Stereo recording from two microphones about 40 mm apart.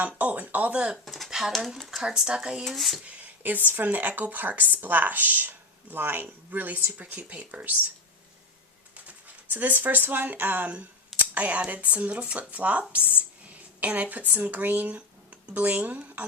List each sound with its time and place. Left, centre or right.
0.2 s speech: right
0.7 s speech: right
1.0 s a sound: centre
1.3 s a sound: centre
2.0 s speech: centre
2.6 s dishes: centre
3.4 s speech: right
6.9 s speech: right
9.0 s speech: right
11.3 s a woman's voice: right
16.2 s music: right